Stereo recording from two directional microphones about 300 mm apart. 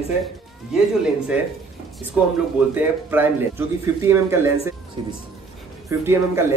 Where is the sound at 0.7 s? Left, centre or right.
Centre.